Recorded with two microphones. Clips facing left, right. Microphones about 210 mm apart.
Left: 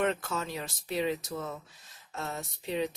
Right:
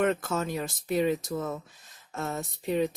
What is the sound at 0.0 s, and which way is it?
Speech, 50° right (ahead or behind).